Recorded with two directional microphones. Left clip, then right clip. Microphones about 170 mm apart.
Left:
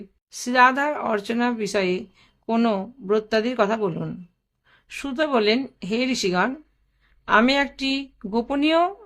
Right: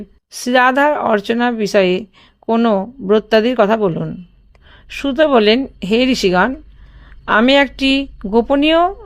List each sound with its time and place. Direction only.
0.3 s speech: 40° right (ahead or behind)
2.6 s speech: 25° right (ahead or behind)